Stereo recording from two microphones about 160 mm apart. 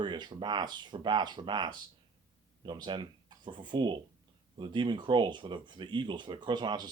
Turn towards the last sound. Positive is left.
turn(degrees=-25)  # may be behind; listen again after turning